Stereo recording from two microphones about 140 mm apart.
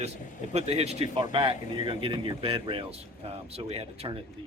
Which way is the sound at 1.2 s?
40° right (ahead or behind).